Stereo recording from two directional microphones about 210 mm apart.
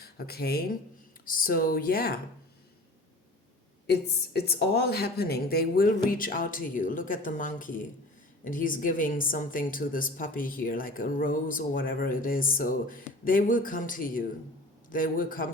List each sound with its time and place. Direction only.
0.0 s speech: 50° left (ahead or behind)
4.4 s a woman's voice: 50° left (ahead or behind)